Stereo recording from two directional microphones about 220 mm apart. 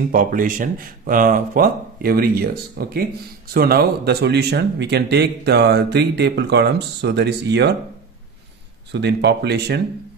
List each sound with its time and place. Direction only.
0.1 s speech: 40° right (ahead or behind)
8.9 s speech: 50° right (ahead or behind)